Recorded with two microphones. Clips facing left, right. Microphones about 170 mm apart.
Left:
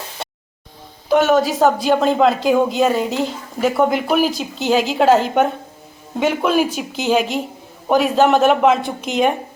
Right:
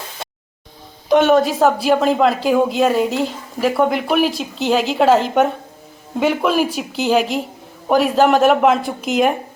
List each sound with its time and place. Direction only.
1.1 s speech: centre (ahead or behind)